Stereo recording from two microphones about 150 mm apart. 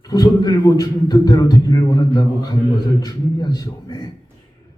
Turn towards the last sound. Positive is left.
turn(degrees=25)  # may be behind; listen again after turning